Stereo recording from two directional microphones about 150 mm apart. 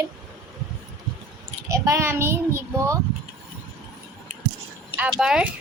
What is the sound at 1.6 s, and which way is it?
Speech, 20° right (ahead or behind).